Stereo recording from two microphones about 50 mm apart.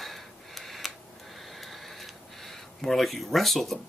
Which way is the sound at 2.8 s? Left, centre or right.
Centre.